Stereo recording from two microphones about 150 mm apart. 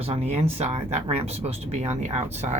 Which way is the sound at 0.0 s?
45° right (ahead or behind).